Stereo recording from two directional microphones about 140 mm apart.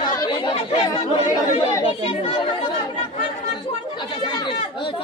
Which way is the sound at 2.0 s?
45° left (ahead or behind).